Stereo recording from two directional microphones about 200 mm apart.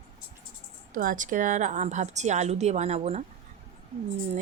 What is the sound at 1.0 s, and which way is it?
A woman's voice, 40° right (ahead or behind).